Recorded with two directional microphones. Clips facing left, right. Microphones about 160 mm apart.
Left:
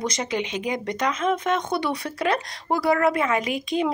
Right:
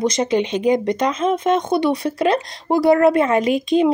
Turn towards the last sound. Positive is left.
turn(degrees=-25)  # may be behind; listen again after turning